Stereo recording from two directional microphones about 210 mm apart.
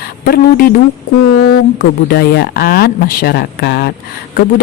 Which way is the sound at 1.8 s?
45° left (ahead or behind).